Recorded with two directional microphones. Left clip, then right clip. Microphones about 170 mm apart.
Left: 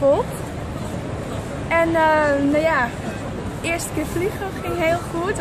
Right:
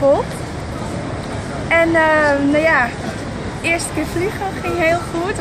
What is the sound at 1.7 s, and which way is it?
Speech, 15° left (ahead or behind).